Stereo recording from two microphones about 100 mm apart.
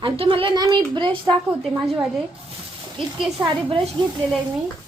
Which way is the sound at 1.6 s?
Centre (ahead or behind).